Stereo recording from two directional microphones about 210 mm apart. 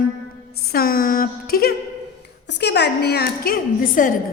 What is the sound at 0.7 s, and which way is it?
A woman's voice, 45° left (ahead or behind).